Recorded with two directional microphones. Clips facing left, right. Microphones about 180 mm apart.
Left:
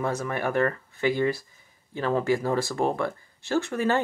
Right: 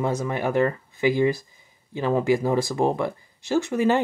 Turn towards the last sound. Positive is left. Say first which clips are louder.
# right 3 dB
turn(degrees=-15)  # may be behind; listen again after turning